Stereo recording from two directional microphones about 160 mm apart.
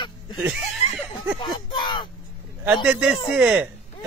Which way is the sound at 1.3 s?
30° left (ahead or behind).